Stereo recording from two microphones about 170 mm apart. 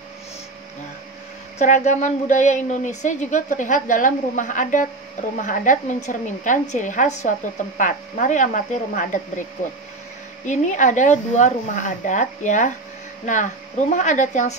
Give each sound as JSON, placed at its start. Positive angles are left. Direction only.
{"t": 1.6, "sound": "a woman's voice", "side_deg": 45}
{"t": 10.4, "sound": "a woman's voice", "side_deg": 45}